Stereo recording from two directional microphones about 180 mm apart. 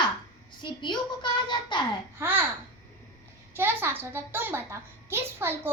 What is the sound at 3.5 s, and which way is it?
A child's voice, 10° right (ahead or behind).